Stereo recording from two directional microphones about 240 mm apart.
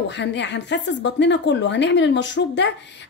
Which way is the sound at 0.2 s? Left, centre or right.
Left.